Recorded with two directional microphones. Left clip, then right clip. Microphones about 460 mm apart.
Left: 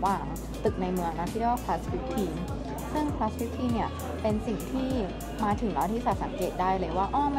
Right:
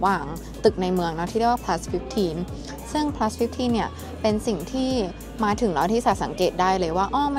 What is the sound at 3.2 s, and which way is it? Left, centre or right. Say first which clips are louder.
Speech: right 7 dB; right.